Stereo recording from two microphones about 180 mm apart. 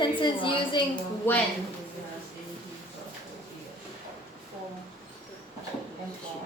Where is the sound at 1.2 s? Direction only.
10° left (ahead or behind).